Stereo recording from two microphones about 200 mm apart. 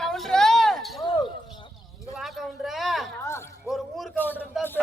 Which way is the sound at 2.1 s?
Centre (ahead or behind).